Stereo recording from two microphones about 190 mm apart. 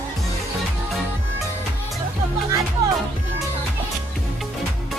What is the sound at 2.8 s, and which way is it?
Music, 20° right (ahead or behind).